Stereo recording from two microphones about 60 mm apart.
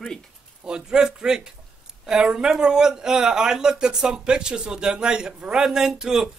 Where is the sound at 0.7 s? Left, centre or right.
Centre.